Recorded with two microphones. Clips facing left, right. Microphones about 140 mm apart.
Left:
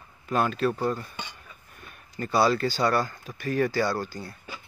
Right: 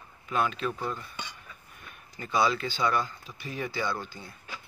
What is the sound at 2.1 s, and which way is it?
Speech, 40° left (ahead or behind).